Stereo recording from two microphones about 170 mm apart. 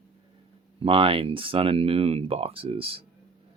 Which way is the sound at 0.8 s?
35° right (ahead or behind).